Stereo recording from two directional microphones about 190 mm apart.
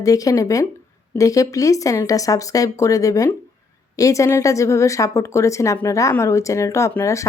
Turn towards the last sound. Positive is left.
turn(degrees=15)  # may be behind; listen again after turning